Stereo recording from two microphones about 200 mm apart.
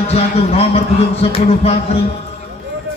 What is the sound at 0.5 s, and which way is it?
Music, 30° left (ahead or behind).